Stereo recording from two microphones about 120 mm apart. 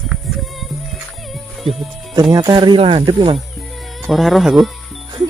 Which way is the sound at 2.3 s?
35° right (ahead or behind).